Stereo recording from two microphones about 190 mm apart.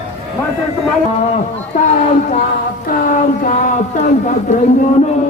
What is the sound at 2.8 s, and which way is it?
Speech, 45° left (ahead or behind).